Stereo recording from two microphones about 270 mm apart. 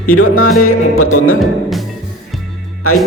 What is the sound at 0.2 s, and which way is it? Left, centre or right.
Speech, left.